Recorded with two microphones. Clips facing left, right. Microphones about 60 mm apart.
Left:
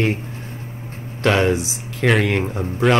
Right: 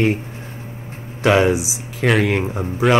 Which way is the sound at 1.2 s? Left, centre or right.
Centre.